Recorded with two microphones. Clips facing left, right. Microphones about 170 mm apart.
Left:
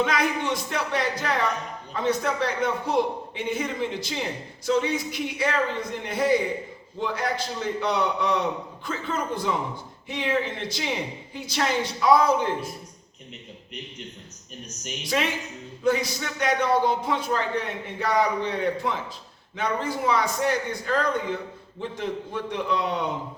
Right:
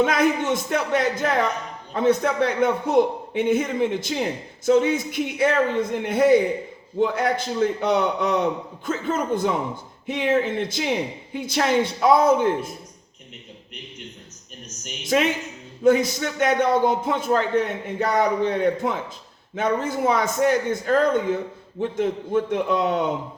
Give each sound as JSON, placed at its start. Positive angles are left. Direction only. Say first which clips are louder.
{"t": 0.0, "sound": "a man's voice", "louder": "right 5 dB", "side_deg": -50}
{"t": 15.1, "sound": "a woman's voice", "louder": "right 6 dB", "side_deg": -40}
{"t": 15.8, "sound": "a man's voice", "louder": "right 6 dB", "side_deg": -50}